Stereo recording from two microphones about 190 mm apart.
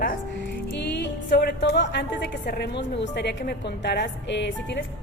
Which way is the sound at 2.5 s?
60° left (ahead or behind).